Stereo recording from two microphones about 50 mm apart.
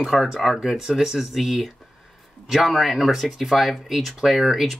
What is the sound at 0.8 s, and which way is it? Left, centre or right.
Speech, centre.